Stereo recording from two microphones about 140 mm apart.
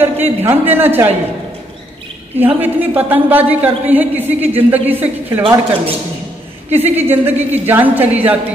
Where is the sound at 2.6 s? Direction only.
15° right (ahead or behind).